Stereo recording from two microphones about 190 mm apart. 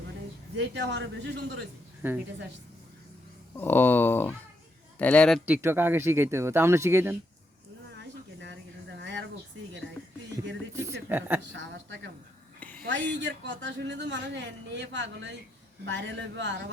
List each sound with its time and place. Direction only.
0.5 s speech: 65° right (ahead or behind)
2.0 s a woman's voice: 10° right (ahead or behind)
3.6 s speech: 10° left (ahead or behind)
5.5 s speech: 10° right (ahead or behind)
7.9 s a sound: 70° right (ahead or behind)
11.5 s speech: 70° right (ahead or behind)
12.5 s a sound: 10° left (ahead or behind)
12.9 s speech: 70° right (ahead or behind)